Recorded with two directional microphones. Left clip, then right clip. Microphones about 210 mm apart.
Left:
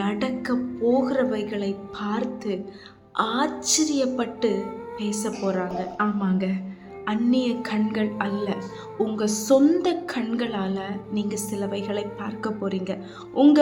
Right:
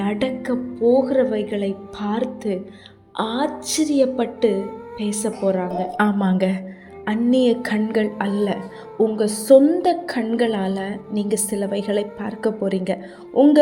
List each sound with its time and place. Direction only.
0.0 s a woman's voice: 25° right (ahead or behind)
6.0 s a woman's voice: 35° right (ahead or behind)
9.0 s music: 15° right (ahead or behind)
9.5 s a woman's voice: 10° right (ahead or behind)